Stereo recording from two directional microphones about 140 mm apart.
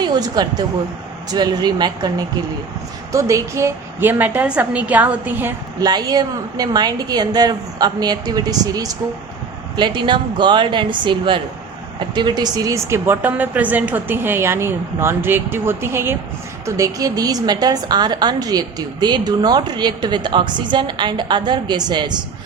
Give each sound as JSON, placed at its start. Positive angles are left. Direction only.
{"t": 0.0, "sound": "a woman's voice", "side_deg": -30}
{"t": 5.8, "sound": "a woman's voice", "side_deg": -30}